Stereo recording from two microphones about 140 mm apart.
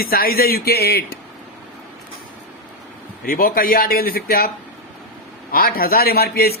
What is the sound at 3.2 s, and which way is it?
A man's voice, 90° left.